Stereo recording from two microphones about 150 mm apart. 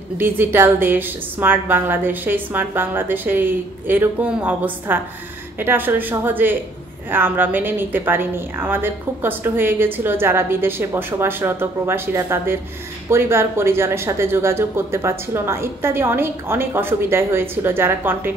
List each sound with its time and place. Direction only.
0.2 s a woman's voice: 15° right (ahead or behind)